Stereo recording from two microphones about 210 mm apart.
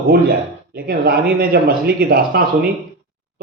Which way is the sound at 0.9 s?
45° right (ahead or behind).